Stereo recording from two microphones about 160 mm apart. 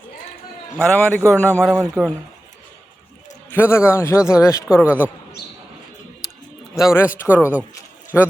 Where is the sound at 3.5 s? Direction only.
15° left (ahead or behind).